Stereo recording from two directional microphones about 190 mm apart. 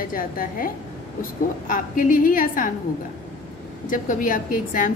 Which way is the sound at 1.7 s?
45° left (ahead or behind).